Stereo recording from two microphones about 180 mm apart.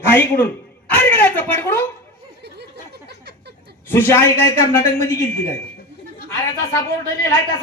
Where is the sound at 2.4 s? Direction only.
65° right (ahead or behind).